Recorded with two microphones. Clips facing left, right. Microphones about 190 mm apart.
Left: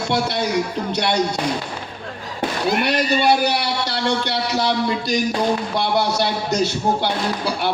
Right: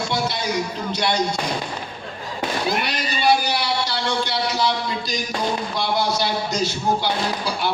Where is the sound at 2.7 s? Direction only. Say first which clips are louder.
Left 6 dB; 60° left (ahead or behind).